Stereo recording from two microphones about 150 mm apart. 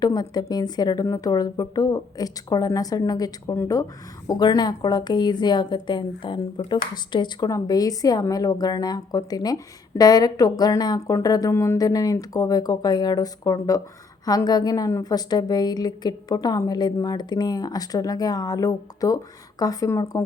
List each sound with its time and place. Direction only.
0.0 s a woman's voice: 25° left (ahead or behind)